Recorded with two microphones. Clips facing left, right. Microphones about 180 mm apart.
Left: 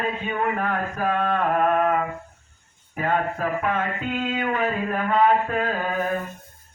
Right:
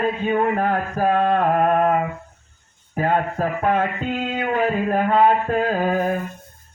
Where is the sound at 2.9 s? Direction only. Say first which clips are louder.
Right 3 dB; 35° right (ahead or behind).